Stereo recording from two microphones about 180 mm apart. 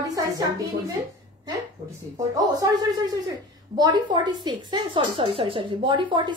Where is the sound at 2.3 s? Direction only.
20° right (ahead or behind).